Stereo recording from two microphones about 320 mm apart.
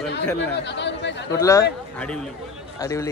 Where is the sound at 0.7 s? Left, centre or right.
Left.